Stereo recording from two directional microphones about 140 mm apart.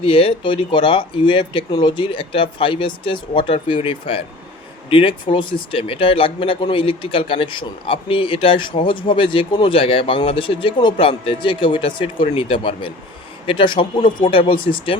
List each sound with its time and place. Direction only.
0.0 s speech: 40° left (ahead or behind)